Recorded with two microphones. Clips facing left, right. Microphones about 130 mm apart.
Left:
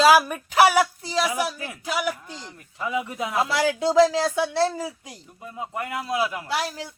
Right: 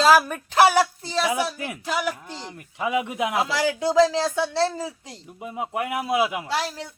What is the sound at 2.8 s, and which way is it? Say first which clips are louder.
Speech: right 3 dB; 75° right (ahead or behind).